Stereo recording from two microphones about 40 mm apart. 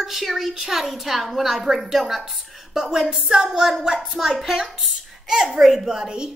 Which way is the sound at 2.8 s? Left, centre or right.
Centre.